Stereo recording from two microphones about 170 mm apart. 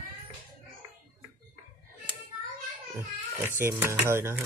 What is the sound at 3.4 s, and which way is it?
Speech, 15° right (ahead or behind).